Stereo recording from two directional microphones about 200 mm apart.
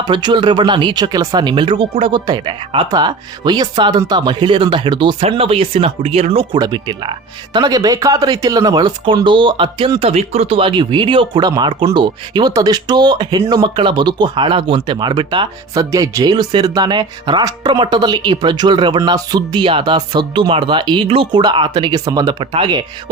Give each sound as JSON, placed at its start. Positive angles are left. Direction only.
{"t": 0.0, "sound": "speech", "side_deg": -20}